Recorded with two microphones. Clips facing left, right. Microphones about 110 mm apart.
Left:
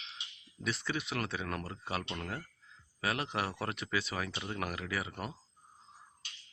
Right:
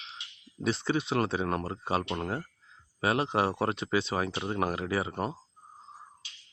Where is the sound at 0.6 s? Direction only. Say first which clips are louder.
Right 8 dB; 30° right (ahead or behind).